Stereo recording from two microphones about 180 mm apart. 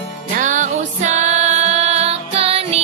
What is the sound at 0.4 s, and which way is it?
Music, 45° right (ahead or behind).